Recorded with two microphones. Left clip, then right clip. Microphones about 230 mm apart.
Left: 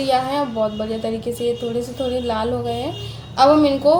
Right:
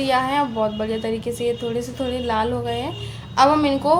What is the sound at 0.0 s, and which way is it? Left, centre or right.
A woman's voice, right.